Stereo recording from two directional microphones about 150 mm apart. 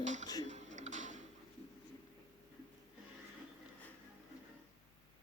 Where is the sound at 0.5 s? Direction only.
50° right (ahead or behind).